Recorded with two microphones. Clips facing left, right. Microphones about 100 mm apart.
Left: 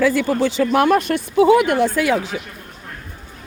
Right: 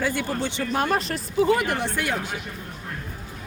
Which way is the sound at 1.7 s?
90° left.